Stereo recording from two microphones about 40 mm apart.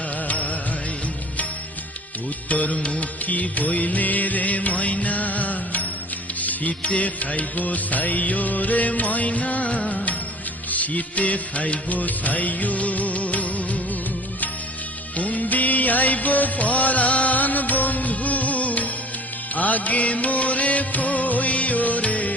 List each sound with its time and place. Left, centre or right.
0.3 s music: left
2.5 s music: left
3.2 s music: left
15.1 s music of bollywood: left
19.5 s music: left